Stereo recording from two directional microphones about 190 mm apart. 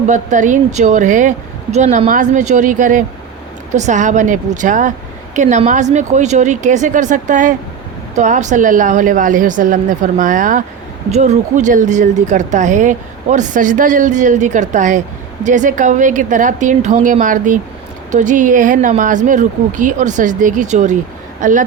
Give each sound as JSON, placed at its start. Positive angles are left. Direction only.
{"t": 0.1, "sound": "a woman's voice", "side_deg": -40}